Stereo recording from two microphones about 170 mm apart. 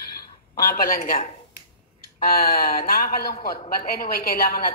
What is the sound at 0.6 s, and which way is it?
Speech, 55° left (ahead or behind).